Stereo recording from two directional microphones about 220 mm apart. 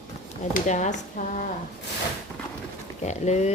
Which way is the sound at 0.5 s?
35° left (ahead or behind).